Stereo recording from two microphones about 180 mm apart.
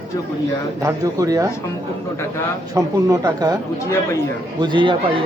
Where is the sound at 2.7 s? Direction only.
20° right (ahead or behind).